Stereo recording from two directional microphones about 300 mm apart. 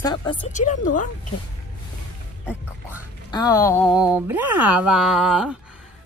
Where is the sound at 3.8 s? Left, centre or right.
Centre.